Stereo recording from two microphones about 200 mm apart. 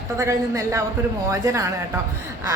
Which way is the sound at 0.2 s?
15° right (ahead or behind).